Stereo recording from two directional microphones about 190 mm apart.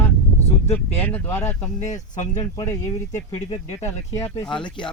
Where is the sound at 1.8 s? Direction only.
40° left (ahead or behind).